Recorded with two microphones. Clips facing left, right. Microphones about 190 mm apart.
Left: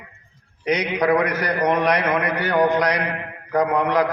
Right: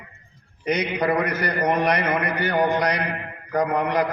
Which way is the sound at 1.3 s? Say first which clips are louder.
Left 2 dB; 60° right (ahead or behind).